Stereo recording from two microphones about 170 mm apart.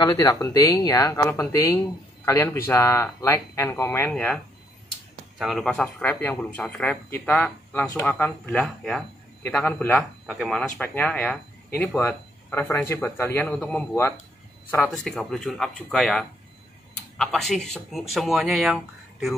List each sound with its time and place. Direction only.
0.0 s speech: 20° left (ahead or behind)
5.4 s speech: centre (ahead or behind)
14.9 s speech: centre (ahead or behind)